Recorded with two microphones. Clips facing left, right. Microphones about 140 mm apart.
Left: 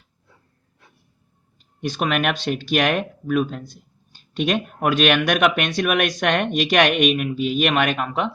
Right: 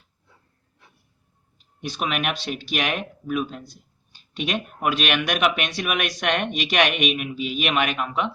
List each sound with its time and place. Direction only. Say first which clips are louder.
1.9 s speech: left 4 dB; 45° left (ahead or behind)